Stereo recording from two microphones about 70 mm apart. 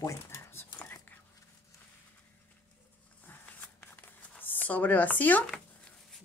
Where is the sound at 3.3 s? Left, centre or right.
Left.